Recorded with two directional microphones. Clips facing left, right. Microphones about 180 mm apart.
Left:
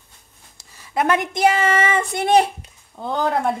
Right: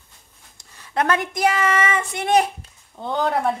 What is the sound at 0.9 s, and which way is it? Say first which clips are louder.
A woman's voice: left 2 dB; 15° left (ahead or behind).